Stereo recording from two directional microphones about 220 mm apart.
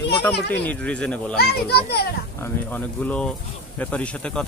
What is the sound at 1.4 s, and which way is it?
Speech, 45° left (ahead or behind).